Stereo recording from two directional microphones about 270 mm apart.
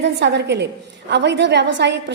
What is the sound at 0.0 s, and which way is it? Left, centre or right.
A woman's voice, right.